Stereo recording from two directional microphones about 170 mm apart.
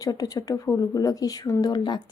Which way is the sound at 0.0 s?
20° left (ahead or behind).